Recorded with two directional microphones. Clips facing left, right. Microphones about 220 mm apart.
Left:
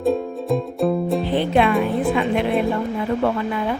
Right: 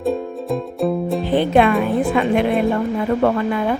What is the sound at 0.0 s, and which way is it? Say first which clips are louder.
Music: left 1 dB; centre (ahead or behind).